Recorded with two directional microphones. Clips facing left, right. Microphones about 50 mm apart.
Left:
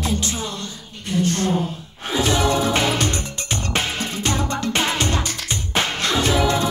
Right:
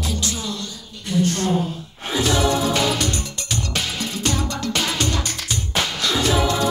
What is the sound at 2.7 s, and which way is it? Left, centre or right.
Music, left.